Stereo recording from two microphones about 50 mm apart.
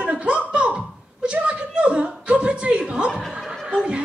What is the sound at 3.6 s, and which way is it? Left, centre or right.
Speech, right.